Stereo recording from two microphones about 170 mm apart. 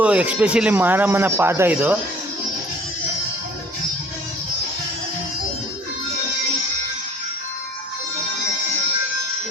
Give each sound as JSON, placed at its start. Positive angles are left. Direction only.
{"t": 0.0, "sound": "a man's voice", "side_deg": -10}